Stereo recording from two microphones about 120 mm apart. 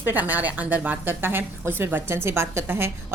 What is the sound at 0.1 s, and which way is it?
A woman's voice, 15° right (ahead or behind).